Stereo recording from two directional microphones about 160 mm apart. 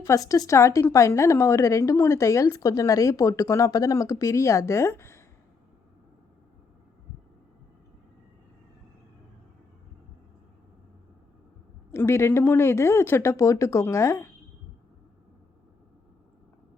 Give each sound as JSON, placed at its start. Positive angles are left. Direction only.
{"t": 0.0, "sound": "a woman's voice", "side_deg": 20}
{"t": 11.9, "sound": "speech", "side_deg": 15}